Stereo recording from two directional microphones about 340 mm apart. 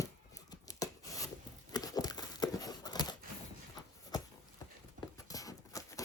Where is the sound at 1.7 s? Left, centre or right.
Centre.